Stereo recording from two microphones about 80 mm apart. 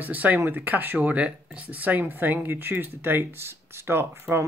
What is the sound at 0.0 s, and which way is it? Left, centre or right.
Speech, right.